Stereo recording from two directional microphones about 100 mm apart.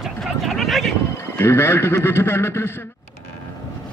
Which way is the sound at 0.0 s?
Centre (ahead or behind).